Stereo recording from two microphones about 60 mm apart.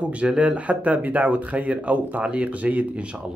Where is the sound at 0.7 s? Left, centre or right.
Right.